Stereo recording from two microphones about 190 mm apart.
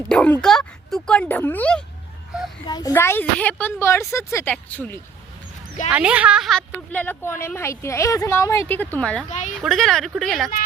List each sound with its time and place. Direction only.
0.1 s speech: 5° left (ahead or behind)
2.6 s speech: 20° left (ahead or behind)
5.9 s speech: 5° right (ahead or behind)
9.3 s speech: 40° left (ahead or behind)
9.6 s speech: centre (ahead or behind)